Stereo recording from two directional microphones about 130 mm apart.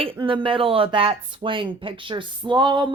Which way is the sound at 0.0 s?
40° right (ahead or behind).